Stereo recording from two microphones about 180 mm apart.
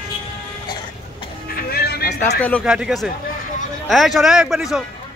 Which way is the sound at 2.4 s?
10° left (ahead or behind).